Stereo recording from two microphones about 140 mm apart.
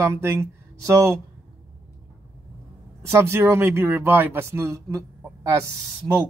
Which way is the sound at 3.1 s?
20° right (ahead or behind).